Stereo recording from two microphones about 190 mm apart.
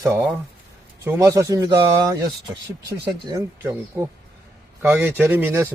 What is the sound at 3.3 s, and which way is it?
A man's voice, 15° right (ahead or behind).